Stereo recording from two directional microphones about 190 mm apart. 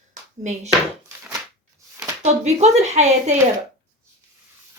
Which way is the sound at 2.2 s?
35° right (ahead or behind).